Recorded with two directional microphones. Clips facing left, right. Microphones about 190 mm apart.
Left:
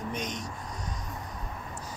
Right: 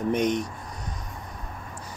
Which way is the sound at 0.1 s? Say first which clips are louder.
Right 11 dB; 60° right (ahead or behind).